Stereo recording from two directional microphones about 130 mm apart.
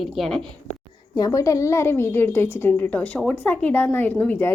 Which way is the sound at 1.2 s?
25° left (ahead or behind).